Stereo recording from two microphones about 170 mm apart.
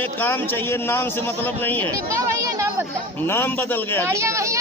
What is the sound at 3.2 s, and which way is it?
Speech, 15° left (ahead or behind).